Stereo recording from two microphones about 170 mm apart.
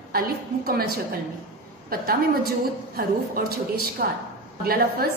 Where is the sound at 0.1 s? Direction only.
60° right (ahead or behind).